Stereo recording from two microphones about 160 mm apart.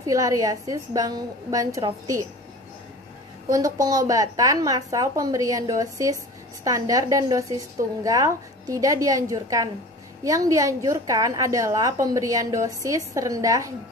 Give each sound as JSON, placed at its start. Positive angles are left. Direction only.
{"t": 0.0, "sound": "a woman's voice", "side_deg": -20}
{"t": 3.5, "sound": "a woman's voice", "side_deg": -20}